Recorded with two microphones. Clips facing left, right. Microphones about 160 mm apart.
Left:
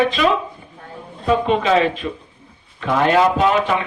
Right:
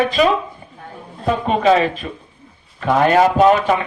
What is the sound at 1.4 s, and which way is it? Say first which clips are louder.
A man's voice: right 4 dB; 40° right (ahead or behind).